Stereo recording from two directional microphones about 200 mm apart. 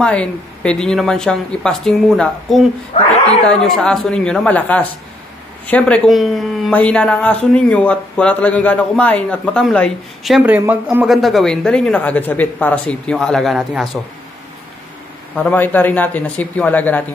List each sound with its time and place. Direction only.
0.0 s speech: 5° left (ahead or behind)
2.9 s a sound: 35° left (ahead or behind)
3.4 s speech: 5° left (ahead or behind)
15.3 s speech: 10° left (ahead or behind)